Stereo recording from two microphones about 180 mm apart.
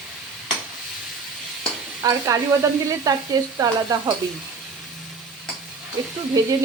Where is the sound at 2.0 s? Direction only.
20° right (ahead or behind).